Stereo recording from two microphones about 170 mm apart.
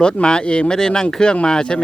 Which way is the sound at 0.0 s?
5° left (ahead or behind).